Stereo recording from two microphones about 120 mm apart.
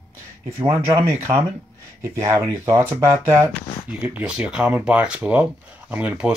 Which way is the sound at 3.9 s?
10° right (ahead or behind).